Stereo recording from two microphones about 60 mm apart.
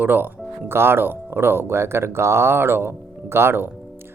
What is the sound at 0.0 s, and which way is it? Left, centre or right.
Speech, right.